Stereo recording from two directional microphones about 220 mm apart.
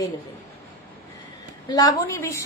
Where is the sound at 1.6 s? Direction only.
15° left (ahead or behind).